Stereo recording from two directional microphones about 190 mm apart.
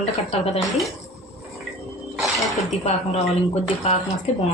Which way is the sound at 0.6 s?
Centre (ahead or behind).